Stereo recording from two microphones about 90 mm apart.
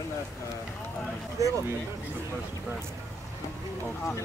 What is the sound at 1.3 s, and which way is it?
Speech, 35° right (ahead or behind).